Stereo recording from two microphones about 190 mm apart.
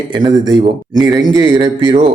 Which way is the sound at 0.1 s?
25° right (ahead or behind).